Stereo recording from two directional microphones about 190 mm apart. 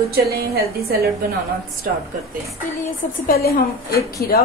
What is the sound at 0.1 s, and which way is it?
A woman's voice, 55° right (ahead or behind).